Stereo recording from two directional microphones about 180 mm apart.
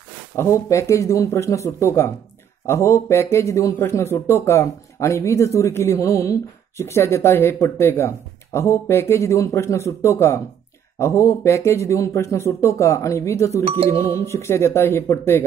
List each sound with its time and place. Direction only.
0.4 s speech: 15° left (ahead or behind)